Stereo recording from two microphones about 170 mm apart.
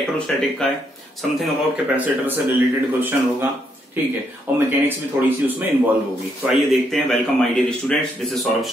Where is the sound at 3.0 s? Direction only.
10° right (ahead or behind).